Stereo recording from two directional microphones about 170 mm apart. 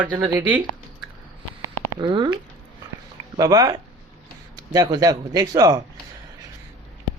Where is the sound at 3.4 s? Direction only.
20° right (ahead or behind).